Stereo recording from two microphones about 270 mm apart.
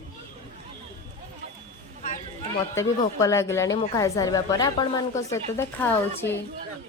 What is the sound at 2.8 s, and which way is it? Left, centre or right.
A woman's voice, centre.